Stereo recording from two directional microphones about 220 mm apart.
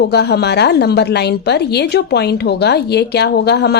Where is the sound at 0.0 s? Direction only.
50° left (ahead or behind).